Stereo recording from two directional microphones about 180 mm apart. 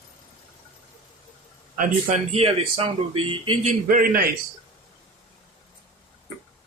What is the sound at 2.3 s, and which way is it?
Speech, 35° right (ahead or behind).